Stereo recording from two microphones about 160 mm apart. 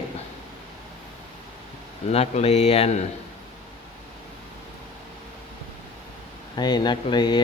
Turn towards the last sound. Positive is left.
turn(degrees=25)  # may be behind; listen again after turning